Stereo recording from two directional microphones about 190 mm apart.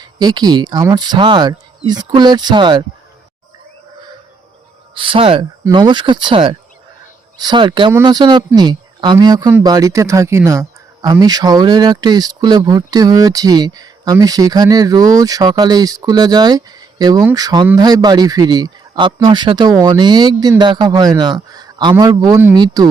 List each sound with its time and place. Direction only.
0.2 s speech: 20° right (ahead or behind)
4.9 s speech: 25° right (ahead or behind)